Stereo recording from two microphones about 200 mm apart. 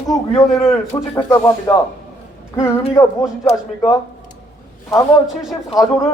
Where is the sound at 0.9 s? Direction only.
15° left (ahead or behind).